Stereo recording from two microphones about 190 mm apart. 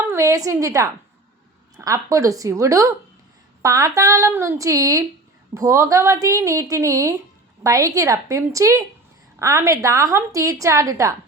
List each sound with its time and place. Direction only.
0.0 s a woman's voice: 15° right (ahead or behind)